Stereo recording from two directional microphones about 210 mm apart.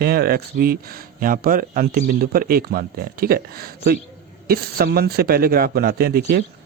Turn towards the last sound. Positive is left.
turn(degrees=-50)  # may be behind; listen again after turning